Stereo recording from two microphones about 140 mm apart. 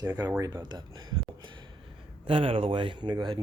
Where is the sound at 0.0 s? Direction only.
25° right (ahead or behind).